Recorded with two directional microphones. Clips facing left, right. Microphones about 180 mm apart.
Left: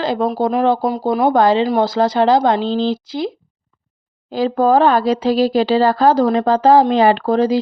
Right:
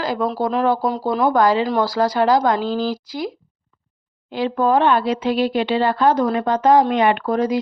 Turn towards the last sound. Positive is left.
turn(degrees=30)  # may be behind; listen again after turning